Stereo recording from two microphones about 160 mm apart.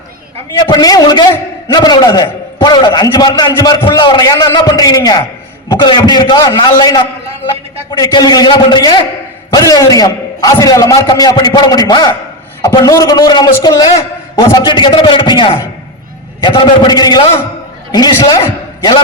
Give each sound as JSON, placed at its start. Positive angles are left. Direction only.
{"t": 0.6, "sound": "a man's voice", "side_deg": 25}